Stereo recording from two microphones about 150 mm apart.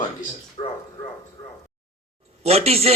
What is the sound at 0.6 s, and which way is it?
Speech, 40° left (ahead or behind).